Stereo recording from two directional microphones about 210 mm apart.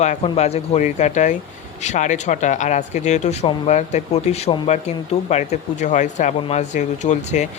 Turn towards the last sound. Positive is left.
turn(degrees=35)  # may be behind; listen again after turning